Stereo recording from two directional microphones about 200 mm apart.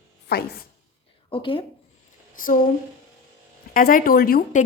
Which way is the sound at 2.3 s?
45° left (ahead or behind).